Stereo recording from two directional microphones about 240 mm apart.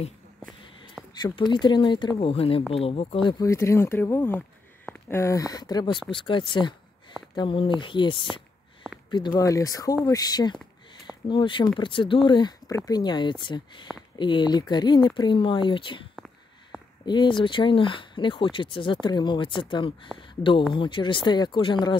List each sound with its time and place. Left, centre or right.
1.2 s speech: centre